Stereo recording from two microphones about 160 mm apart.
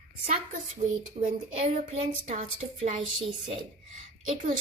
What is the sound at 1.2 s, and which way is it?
A woman's voice, 40° right (ahead or behind).